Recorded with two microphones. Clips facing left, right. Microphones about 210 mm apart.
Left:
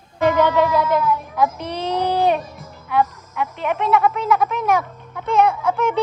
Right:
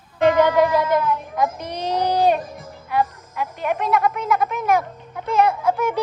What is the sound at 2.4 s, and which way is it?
Music, 50° right (ahead or behind).